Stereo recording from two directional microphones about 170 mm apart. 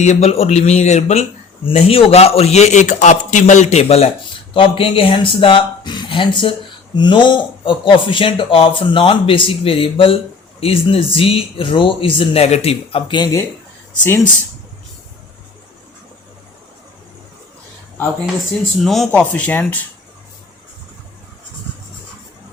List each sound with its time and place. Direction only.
0.0 s speech: 40° left (ahead or behind); by 13.4 s 25° left (ahead or behind)
18.8 s speech: centre (ahead or behind)